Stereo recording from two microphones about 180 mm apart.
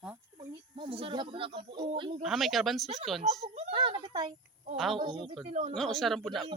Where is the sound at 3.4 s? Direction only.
35° right (ahead or behind).